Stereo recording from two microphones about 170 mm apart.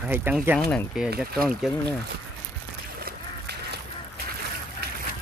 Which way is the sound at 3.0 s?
70° right (ahead or behind).